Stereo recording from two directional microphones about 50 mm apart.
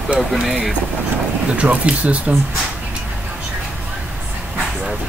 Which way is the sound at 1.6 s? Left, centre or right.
Right.